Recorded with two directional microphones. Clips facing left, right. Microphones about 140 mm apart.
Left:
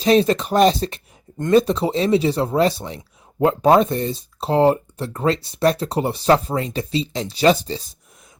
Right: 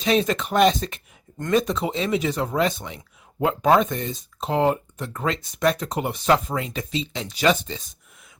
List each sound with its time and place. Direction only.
0.0 s speech: 35° left (ahead or behind)